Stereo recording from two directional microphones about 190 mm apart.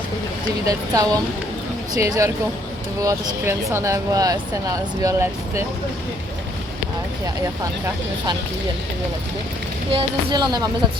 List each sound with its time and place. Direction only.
0.6 s speech: 20° right (ahead or behind)
7.6 s speech: 20° right (ahead or behind)
9.9 s speech: 25° right (ahead or behind)